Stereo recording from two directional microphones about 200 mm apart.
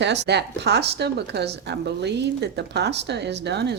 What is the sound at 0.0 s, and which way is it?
A woman's voice, 60° right (ahead or behind).